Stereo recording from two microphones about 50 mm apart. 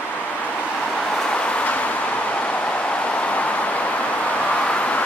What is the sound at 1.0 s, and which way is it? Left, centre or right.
Vehicle, centre.